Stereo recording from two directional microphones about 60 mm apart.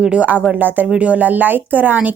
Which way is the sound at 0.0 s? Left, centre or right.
Centre.